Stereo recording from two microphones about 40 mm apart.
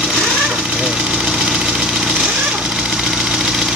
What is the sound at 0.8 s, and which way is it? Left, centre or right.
Speech, centre.